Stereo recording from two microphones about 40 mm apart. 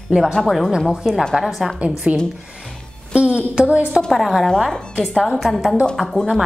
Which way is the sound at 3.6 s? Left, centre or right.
Right.